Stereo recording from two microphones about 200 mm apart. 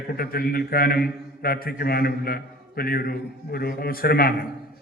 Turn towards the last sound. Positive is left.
turn(degrees=50)  # may be behind; listen again after turning